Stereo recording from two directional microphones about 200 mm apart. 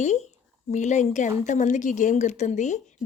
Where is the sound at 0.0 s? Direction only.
35° left (ahead or behind).